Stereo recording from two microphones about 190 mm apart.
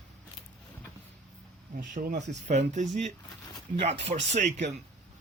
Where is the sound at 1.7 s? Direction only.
45° right (ahead or behind).